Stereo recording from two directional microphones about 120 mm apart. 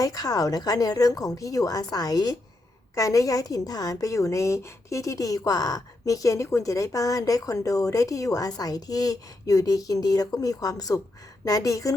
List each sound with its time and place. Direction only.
0.0 s a woman's voice: 30° left (ahead or behind)